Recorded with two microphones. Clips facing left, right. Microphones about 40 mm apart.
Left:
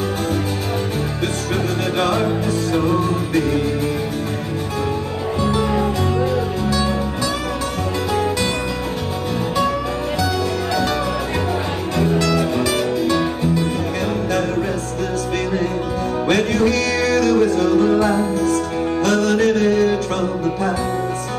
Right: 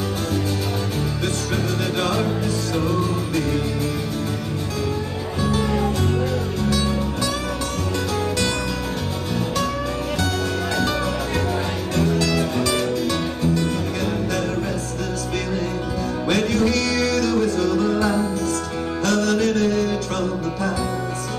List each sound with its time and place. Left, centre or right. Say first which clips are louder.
2.0 s music: left 5 dB; left
5.6 s music: left 3 dB; centre
12.1 s music: left 4 dB; left
12.4 s music: left 3 dB; centre
16.3 s music: left 3 dB; left